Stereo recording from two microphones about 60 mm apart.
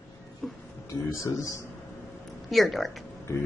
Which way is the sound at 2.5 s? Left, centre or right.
Centre.